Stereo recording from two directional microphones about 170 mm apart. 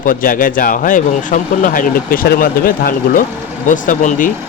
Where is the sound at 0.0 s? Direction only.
55° left (ahead or behind).